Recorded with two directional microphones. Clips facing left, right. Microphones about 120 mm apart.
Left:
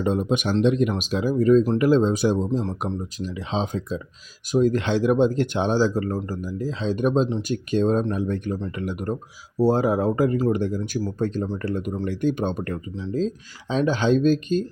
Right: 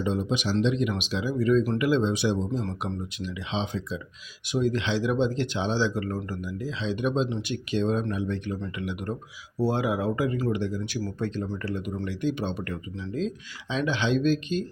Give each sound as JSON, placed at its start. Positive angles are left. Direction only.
{"t": 0.0, "sound": "speech", "side_deg": 50}